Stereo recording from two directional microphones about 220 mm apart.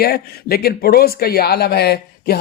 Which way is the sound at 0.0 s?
45° left (ahead or behind).